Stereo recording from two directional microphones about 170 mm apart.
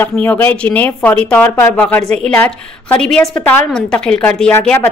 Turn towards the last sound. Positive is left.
turn(degrees=10)  # may be behind; listen again after turning